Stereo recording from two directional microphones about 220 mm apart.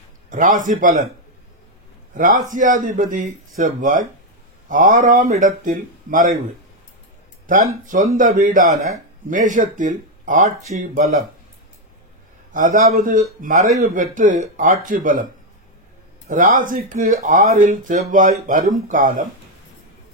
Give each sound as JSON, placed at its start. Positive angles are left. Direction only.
{"t": 0.3, "sound": "speech", "side_deg": -35}
{"t": 2.1, "sound": "speech", "side_deg": -35}
{"t": 7.5, "sound": "speech", "side_deg": -35}
{"t": 12.5, "sound": "speech", "side_deg": -35}
{"t": 16.3, "sound": "speech", "side_deg": -40}